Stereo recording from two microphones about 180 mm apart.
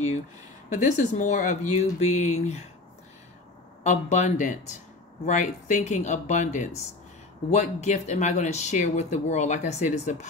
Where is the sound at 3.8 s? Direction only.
40° left (ahead or behind).